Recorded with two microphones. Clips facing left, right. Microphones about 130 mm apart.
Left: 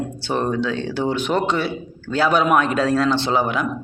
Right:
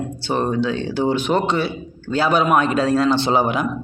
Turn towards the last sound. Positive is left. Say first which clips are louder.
# right 2 dB
turn(degrees=-15)  # may be behind; listen again after turning